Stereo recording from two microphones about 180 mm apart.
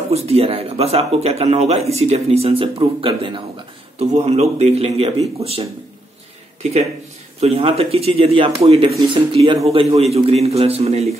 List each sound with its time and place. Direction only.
0.1 s speech: 35° right (ahead or behind)
7.3 s a man's voice: 35° right (ahead or behind)